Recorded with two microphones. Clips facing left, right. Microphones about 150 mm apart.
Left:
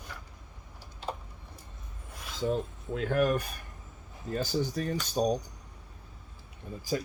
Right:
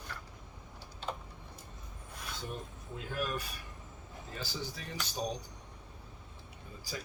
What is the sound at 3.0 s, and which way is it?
Speech, 60° left (ahead or behind).